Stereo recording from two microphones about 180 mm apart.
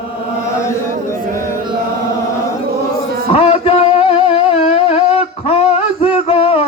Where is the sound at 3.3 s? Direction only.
30° left (ahead or behind).